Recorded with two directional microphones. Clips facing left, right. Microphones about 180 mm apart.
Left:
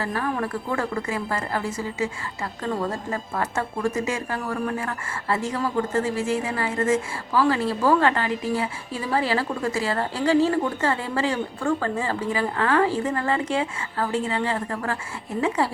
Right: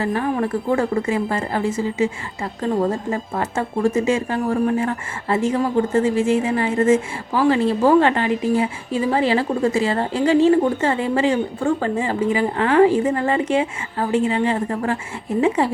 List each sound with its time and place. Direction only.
0.0 s a woman's voice: 20° right (ahead or behind)